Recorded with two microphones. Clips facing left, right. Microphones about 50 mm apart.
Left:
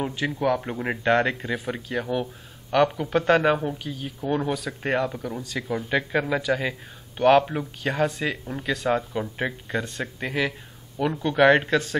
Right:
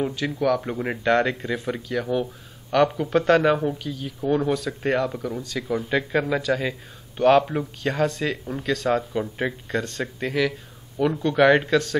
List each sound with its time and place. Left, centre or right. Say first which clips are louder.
0.0 s speech: right 1 dB; centre
0.6 s a man's voice: right 1 dB; centre
2.7 s a man's voice: right 1 dB; centre